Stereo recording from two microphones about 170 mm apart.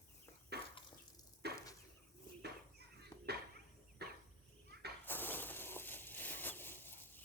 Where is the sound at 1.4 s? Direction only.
70° right (ahead or behind).